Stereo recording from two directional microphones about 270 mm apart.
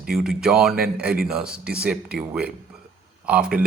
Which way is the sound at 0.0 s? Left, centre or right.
Right.